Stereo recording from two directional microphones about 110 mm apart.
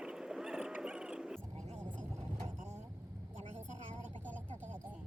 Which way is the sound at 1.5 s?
90° right.